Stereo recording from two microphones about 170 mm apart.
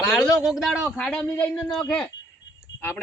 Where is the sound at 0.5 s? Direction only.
Centre (ahead or behind).